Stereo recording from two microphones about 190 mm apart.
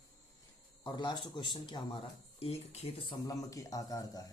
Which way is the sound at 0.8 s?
25° left (ahead or behind).